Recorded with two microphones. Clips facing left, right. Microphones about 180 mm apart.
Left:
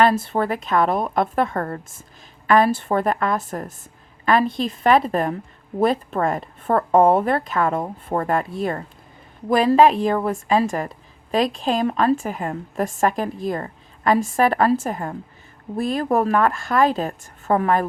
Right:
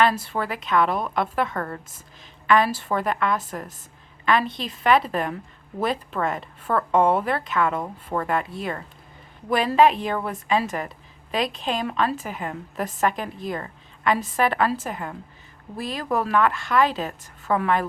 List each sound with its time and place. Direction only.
0.0 s a woman's voice: 45° left (ahead or behind)
7.4 s a woman's voice: 45° left (ahead or behind)
7.8 s a woman's voice: 30° left (ahead or behind)
9.5 s a woman's voice: 40° left (ahead or behind)